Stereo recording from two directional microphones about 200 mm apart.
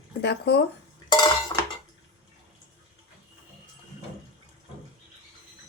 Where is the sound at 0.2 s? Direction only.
55° left (ahead or behind).